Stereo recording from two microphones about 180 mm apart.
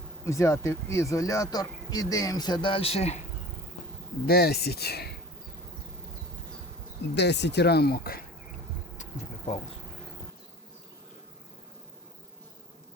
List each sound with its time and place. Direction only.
0.3 s speech: 15° left (ahead or behind); by 3.2 s 35° left (ahead or behind)
4.3 s speech: 60° left (ahead or behind)
7.2 s speech: 70° left (ahead or behind)